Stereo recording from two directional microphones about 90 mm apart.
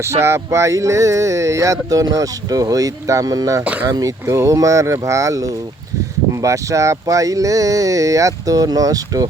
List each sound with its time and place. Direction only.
0.0 s speech: 30° right (ahead or behind)
3.6 s speech: 15° right (ahead or behind)
3.8 s speech: 40° right (ahead or behind)